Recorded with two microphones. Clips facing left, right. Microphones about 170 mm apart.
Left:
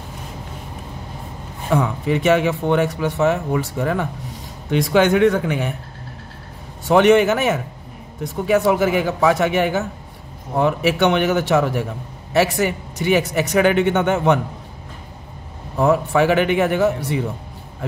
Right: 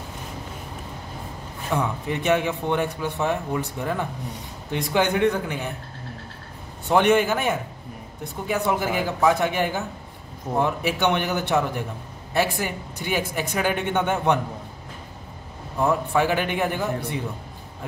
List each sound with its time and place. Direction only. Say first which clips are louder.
1.7 s a man's voice: left 6 dB; 90° left
6.9 s speech: left 6 dB; 90° left
15.8 s speech: left 5 dB; 85° left